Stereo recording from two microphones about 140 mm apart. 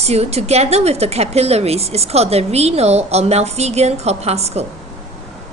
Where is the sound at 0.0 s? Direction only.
50° right (ahead or behind).